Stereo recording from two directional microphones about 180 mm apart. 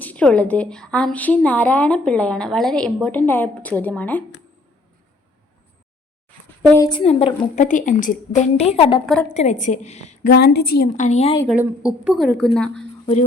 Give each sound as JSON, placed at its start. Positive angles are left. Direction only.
{"t": 0.0, "sound": "a woman's voice", "side_deg": 10}
{"t": 6.6, "sound": "a woman's voice", "side_deg": 10}
{"t": 6.8, "sound": "a woman's voice", "side_deg": 30}
{"t": 10.2, "sound": "a woman's voice", "side_deg": 65}
{"t": 10.9, "sound": "a woman's voice", "side_deg": 40}
{"t": 11.4, "sound": "a woman's voice", "side_deg": -5}